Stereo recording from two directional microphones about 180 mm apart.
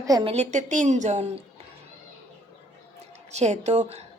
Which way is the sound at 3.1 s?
40° right (ahead or behind).